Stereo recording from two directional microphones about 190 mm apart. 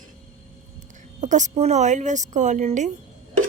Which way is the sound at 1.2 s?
40° right (ahead or behind).